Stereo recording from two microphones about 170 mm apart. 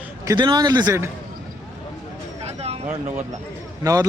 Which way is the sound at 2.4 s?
35° right (ahead or behind).